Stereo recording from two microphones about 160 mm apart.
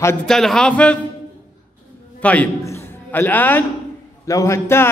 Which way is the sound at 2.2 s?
10° left (ahead or behind).